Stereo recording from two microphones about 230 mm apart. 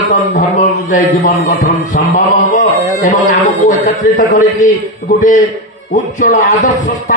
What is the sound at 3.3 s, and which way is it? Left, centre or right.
A man's voice, left.